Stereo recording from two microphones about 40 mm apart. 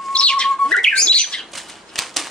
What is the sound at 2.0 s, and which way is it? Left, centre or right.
Typewriter, centre.